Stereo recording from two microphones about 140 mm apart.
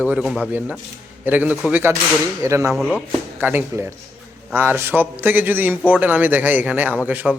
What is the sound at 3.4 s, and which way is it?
A man's voice, 15° right (ahead or behind).